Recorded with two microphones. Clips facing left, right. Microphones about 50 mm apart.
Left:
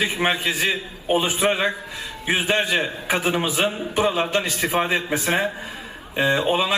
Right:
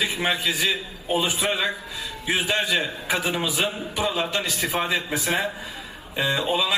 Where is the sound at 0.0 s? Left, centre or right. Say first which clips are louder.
Left 3 dB; left.